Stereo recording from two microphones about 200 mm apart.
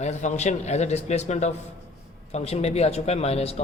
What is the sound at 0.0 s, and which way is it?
A man's voice, 35° left (ahead or behind).